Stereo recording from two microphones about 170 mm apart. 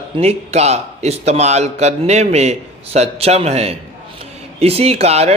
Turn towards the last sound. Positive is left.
turn(degrees=-40)  # may be behind; listen again after turning